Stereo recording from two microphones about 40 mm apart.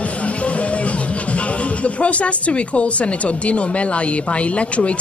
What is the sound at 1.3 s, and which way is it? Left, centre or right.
A man's voice, left.